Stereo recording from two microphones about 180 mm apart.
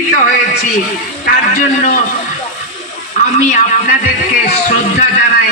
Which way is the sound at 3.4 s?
45° left (ahead or behind).